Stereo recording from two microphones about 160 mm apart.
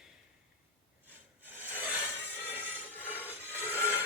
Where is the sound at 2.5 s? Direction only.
10° right (ahead or behind).